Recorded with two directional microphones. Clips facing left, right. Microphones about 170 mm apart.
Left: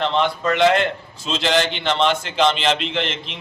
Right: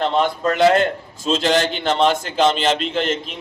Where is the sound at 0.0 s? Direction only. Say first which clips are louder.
Right 2 dB; 40° right (ahead or behind).